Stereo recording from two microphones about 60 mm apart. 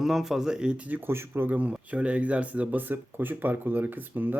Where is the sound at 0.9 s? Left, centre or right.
Right.